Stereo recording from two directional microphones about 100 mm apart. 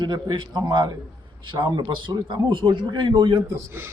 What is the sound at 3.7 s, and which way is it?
Speech, 25° right (ahead or behind).